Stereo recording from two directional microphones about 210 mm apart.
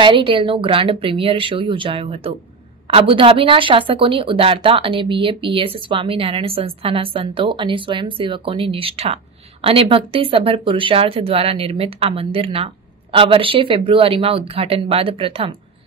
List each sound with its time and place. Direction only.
0.0 s a woman's voice: 25° right (ahead or behind)